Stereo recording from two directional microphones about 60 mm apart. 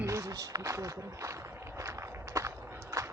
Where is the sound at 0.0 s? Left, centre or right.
Right.